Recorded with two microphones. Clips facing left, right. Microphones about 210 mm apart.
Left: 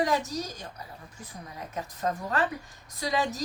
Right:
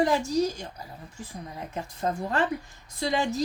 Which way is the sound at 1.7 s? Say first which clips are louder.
Right 1 dB; 30° right (ahead or behind).